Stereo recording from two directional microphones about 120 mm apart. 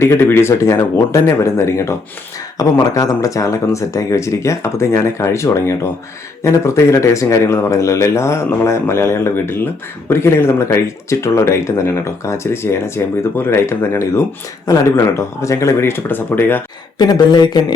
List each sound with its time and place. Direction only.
0.0 s speech: 20° left (ahead or behind)
17.0 s speech: 35° left (ahead or behind)